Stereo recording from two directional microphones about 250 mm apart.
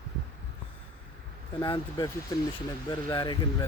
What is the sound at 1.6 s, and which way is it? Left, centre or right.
A man's voice, centre.